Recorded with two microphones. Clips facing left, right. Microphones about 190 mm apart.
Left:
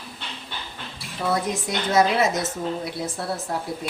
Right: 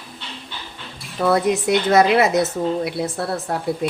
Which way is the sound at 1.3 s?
65° right (ahead or behind).